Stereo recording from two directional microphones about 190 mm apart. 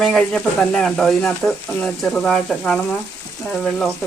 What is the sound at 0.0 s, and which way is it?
Speech, centre (ahead or behind).